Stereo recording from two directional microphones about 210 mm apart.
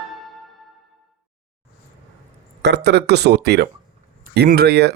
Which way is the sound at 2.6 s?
55° right (ahead or behind).